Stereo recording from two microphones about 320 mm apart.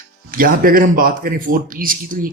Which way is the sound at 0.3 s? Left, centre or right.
Right.